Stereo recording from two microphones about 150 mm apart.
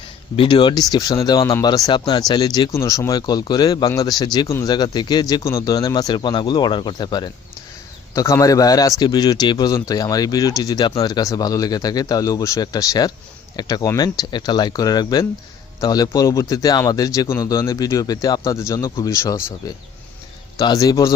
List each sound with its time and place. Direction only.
0.3 s a man's voice: 30° left (ahead or behind)